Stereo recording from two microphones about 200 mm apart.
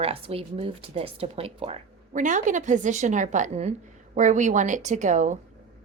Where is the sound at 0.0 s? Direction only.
30° right (ahead or behind).